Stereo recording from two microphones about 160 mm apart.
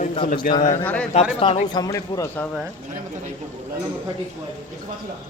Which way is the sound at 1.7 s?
20° left (ahead or behind).